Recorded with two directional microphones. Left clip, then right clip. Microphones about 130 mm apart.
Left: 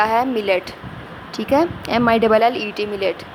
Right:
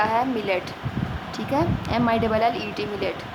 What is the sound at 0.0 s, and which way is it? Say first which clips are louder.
A woman's voice: left 5 dB; 50° left (ahead or behind).